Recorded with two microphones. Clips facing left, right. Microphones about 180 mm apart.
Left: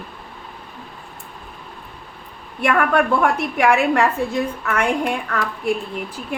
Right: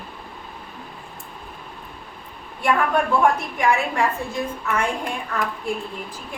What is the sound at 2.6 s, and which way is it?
A woman's voice, 70° left (ahead or behind).